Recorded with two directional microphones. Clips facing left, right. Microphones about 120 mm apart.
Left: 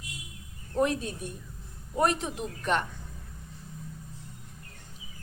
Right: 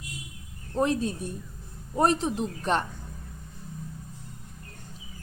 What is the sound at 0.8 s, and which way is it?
A woman's voice, 30° right (ahead or behind).